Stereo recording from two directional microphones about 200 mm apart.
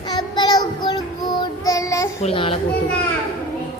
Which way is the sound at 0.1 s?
20° left (ahead or behind).